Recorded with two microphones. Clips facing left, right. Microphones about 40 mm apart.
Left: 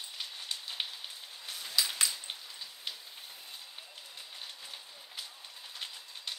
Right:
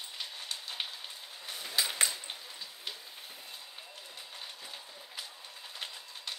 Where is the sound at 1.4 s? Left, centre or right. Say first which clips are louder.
Even; right.